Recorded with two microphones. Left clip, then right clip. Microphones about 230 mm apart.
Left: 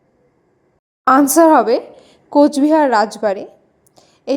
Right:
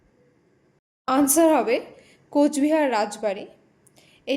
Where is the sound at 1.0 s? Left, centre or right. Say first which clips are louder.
Left 9 dB; left.